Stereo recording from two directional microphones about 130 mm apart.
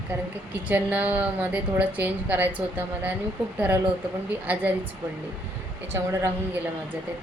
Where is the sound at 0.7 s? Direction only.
10° right (ahead or behind).